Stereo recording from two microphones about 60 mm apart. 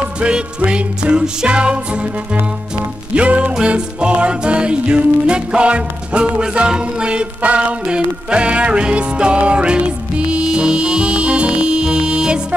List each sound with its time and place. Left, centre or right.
0.2 s music: centre
3.2 s music: centre